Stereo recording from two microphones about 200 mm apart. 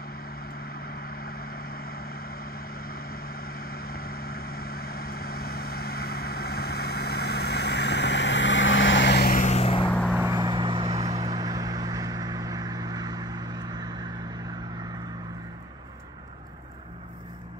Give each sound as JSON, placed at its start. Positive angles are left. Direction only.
{"t": 0.6, "sound": "vehicle", "side_deg": 50}
{"t": 9.8, "sound": "vehicle", "side_deg": 5}
{"t": 10.1, "sound": "vehicle", "side_deg": -15}